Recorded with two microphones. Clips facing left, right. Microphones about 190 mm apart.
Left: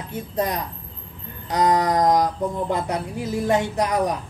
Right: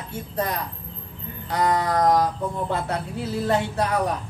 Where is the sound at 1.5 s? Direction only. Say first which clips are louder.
Left 3 dB; 20° left (ahead or behind).